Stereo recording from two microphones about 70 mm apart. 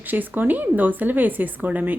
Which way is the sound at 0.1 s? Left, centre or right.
Right.